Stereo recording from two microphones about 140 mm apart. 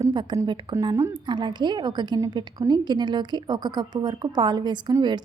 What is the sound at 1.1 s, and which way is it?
A woman's voice, 35° right (ahead or behind).